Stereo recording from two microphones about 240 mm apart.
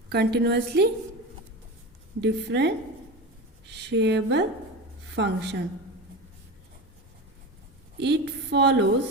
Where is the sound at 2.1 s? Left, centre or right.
Right.